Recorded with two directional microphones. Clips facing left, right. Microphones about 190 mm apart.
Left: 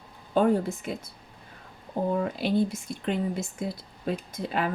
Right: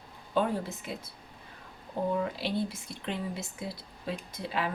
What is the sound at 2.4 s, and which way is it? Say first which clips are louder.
Speech: left 7 dB; 50° left (ahead or behind).